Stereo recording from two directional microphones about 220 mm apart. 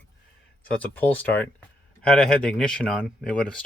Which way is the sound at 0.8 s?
5° left (ahead or behind).